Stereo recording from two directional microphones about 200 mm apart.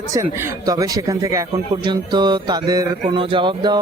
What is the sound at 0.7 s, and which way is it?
Speech, 15° right (ahead or behind).